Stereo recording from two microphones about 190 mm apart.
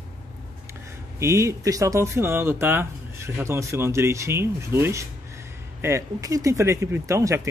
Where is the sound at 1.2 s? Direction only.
15° right (ahead or behind).